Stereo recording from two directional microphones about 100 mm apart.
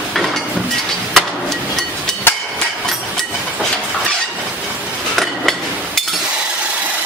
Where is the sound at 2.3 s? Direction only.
20° left (ahead or behind).